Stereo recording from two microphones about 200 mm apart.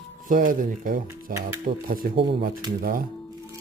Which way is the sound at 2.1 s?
25° right (ahead or behind).